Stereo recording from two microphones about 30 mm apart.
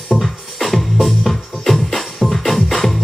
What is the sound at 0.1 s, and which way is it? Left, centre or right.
Music, left.